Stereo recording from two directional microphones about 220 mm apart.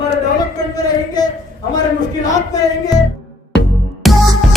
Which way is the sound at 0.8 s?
15° left (ahead or behind).